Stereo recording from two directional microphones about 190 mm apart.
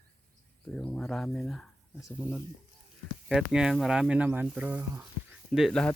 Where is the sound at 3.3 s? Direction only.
5° right (ahead or behind).